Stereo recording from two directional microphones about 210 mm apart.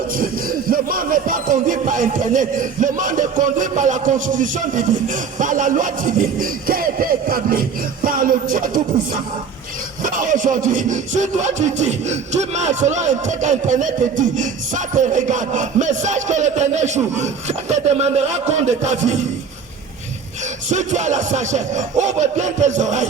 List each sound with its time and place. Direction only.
0.1 s music: 45° right (ahead or behind)
10.0 s music: 40° right (ahead or behind)
20.7 s music: 35° right (ahead or behind)